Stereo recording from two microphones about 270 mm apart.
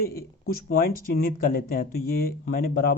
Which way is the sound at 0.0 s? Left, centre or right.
Left.